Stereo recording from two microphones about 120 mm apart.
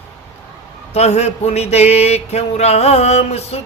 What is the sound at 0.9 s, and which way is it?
Mantra, 65° left (ahead or behind).